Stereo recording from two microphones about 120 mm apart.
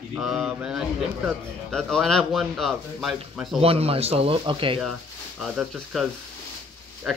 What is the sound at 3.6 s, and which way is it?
Speech, 55° right (ahead or behind).